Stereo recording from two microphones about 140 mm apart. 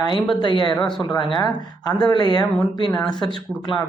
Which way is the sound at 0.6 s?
35° left (ahead or behind).